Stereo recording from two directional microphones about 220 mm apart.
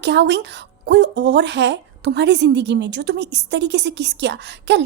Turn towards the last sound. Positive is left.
turn(degrees=-50)  # may be behind; listen again after turning